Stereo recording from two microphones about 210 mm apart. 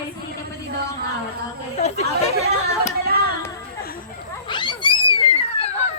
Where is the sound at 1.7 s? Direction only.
30° left (ahead or behind).